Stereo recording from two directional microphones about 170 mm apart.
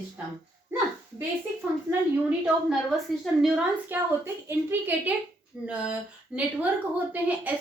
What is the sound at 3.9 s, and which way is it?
A woman's voice, 15° right (ahead or behind).